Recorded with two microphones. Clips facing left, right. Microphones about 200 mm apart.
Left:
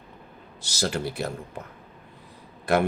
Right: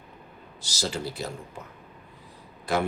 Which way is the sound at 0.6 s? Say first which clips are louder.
Left 3 dB; 65° left (ahead or behind).